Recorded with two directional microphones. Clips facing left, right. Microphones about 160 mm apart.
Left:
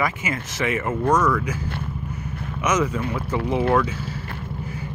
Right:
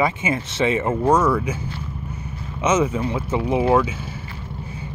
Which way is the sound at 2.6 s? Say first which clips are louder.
Right 3 dB; 25° right (ahead or behind).